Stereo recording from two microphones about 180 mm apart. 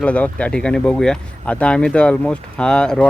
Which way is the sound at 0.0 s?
5° left (ahead or behind).